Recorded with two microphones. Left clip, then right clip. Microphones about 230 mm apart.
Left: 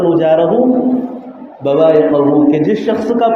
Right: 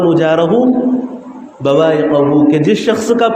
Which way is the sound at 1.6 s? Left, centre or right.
Right.